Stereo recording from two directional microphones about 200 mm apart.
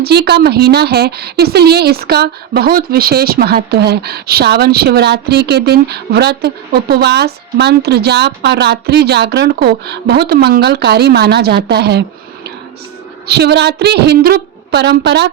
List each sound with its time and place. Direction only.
0.0 s speech: 55° right (ahead or behind)
13.2 s a woman's voice: 55° right (ahead or behind)